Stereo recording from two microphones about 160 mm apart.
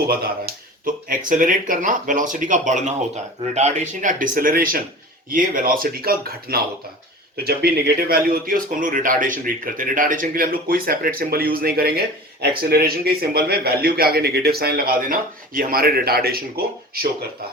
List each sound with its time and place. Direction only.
0.1 s speech: 65° right (ahead or behind)